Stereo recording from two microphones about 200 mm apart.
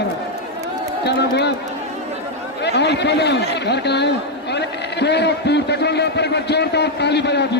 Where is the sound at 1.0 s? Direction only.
55° left (ahead or behind).